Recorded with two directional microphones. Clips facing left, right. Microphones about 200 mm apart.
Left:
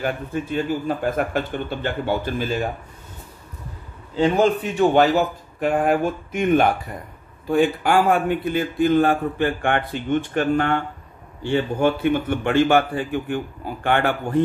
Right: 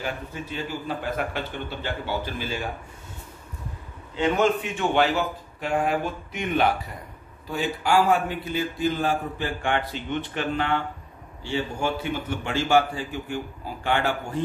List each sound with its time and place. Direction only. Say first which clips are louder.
0.0 s a man's voice: left 7 dB; 50° left (ahead or behind)
4.1 s a man's voice: left 4 dB; 35° left (ahead or behind)
5.6 s a man's voice: left 6 dB; 50° left (ahead or behind)